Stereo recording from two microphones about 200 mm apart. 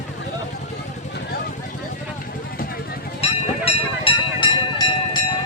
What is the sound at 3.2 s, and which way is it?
Vehicle, 30° left (ahead or behind).